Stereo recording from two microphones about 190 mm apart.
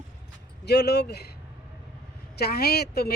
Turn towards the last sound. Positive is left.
turn(degrees=55)  # may be behind; listen again after turning